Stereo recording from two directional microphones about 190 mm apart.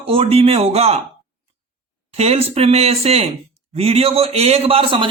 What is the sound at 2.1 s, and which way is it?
Speech, 35° right (ahead or behind).